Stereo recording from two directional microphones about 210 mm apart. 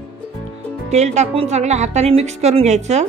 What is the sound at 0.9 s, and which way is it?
Speech, 30° right (ahead or behind).